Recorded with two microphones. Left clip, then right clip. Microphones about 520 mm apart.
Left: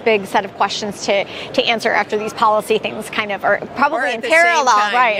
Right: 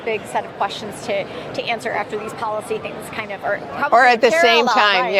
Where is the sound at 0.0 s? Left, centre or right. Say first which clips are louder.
Left 7 dB; left.